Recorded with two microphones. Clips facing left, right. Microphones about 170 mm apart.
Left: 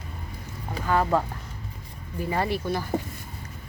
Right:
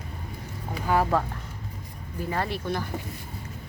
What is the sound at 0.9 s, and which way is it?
Speech, 15° right (ahead or behind).